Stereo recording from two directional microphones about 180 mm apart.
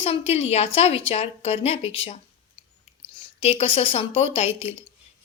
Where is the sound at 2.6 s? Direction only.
25° left (ahead or behind).